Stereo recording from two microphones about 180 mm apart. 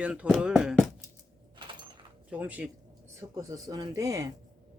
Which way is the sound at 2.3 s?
10° right (ahead or behind).